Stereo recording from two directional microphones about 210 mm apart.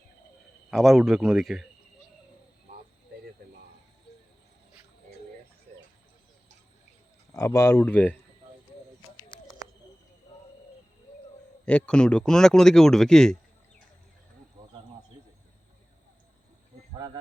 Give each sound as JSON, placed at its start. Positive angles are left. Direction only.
{"t": 0.7, "sound": "speech", "side_deg": 0}
{"t": 7.3, "sound": "speech", "side_deg": 15}
{"t": 11.6, "sound": "speech", "side_deg": 5}
{"t": 14.6, "sound": "a sound", "side_deg": -15}